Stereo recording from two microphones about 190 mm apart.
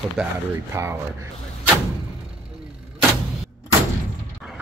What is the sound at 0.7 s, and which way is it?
Speech, 15° right (ahead or behind).